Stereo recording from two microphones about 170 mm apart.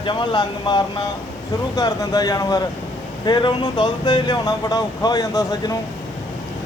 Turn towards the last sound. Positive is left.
turn(degrees=20)  # may be behind; listen again after turning